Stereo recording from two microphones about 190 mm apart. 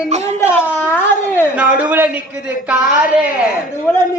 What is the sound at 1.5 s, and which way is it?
A man's voice, 5° right (ahead or behind).